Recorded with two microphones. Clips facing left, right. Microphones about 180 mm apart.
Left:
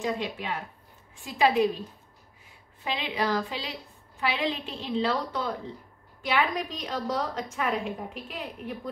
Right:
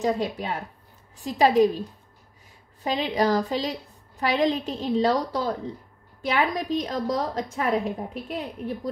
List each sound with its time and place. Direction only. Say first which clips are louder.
0.0 s a woman's voice: right 5 dB; 40° right (ahead or behind)
2.8 s a woman's voice: right 6 dB; 40° right (ahead or behind)